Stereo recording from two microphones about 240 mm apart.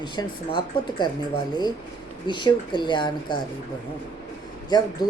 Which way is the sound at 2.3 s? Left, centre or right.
Centre.